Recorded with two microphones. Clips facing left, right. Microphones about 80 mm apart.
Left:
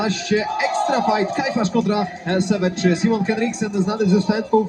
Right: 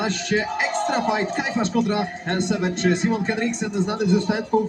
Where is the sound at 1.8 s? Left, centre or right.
Centre.